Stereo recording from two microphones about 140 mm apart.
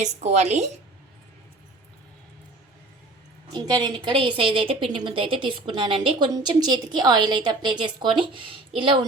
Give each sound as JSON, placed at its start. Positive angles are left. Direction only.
{"t": 0.0, "sound": "speech", "side_deg": -55}
{"t": 3.5, "sound": "a woman's voice", "side_deg": -30}